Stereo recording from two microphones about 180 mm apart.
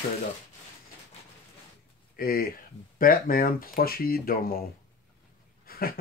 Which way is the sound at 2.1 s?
55° left (ahead or behind).